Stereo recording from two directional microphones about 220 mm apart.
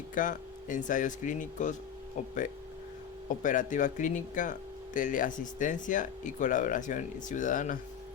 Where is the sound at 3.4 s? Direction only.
35° left (ahead or behind).